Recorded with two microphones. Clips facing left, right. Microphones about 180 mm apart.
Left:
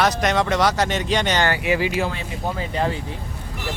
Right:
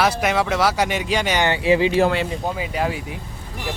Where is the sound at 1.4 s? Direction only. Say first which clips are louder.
Right 4 dB; 25° right (ahead or behind).